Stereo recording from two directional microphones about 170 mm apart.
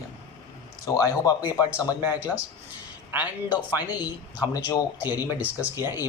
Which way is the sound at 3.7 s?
10° right (ahead or behind).